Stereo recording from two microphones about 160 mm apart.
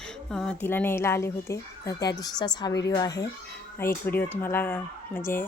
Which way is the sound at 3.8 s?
15° left (ahead or behind).